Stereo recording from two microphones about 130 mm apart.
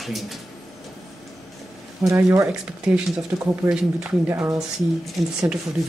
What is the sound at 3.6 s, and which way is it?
Speech, 5° right (ahead or behind).